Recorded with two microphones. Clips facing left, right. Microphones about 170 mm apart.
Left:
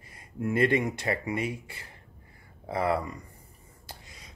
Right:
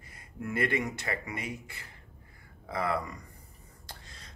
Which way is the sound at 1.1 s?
30° left (ahead or behind).